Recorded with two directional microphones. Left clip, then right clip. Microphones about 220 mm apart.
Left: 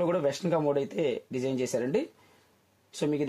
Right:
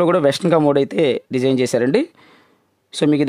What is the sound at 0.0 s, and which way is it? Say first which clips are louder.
Speech: right 12 dB; 50° right (ahead or behind).